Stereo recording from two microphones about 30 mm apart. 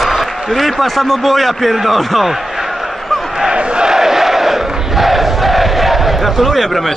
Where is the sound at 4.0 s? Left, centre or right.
Centre.